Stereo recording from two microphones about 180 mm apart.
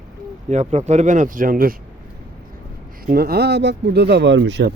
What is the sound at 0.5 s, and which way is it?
Speech, 40° right (ahead or behind).